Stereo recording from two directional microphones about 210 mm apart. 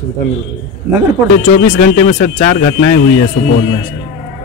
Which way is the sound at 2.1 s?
40° left (ahead or behind).